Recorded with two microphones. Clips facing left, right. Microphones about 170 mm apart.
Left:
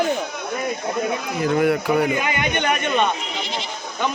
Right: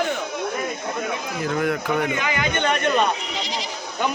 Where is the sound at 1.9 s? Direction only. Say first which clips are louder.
Left 3 dB; 30° left (ahead or behind); by 2.8 s 15° left (ahead or behind).